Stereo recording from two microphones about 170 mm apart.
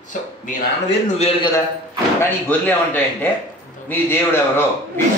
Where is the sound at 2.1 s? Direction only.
10° left (ahead or behind).